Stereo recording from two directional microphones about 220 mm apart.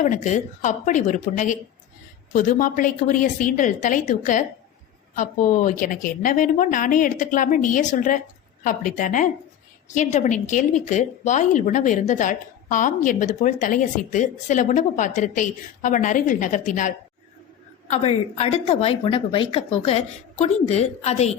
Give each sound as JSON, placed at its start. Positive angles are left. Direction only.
{"t": 0.0, "sound": "a woman's voice", "side_deg": 35}